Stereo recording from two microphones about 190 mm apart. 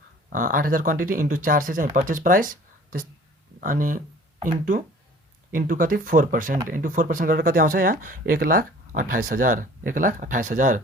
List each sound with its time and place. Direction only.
0.3 s speech: 45° right (ahead or behind)